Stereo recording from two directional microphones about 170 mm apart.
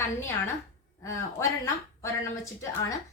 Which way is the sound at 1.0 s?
15° left (ahead or behind).